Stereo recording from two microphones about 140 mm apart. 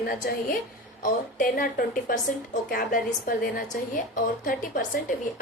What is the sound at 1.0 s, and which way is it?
A woman's voice, 70° left (ahead or behind).